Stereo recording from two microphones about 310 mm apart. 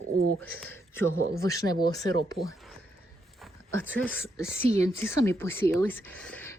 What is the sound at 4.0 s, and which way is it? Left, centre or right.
Speech, centre.